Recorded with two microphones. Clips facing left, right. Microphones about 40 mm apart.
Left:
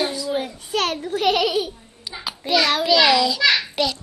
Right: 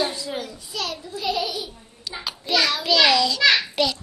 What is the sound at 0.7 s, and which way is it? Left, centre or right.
Speech, left.